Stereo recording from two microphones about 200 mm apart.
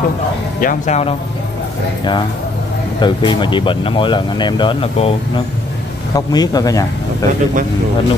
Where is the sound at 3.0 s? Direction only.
20° left (ahead or behind).